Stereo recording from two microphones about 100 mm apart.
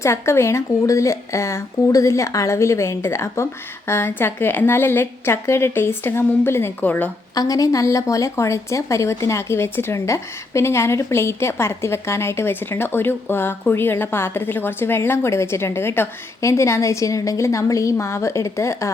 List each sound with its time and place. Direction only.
0.0 s a woman's voice: 30° left (ahead or behind)
7.3 s a woman's voice: 35° left (ahead or behind)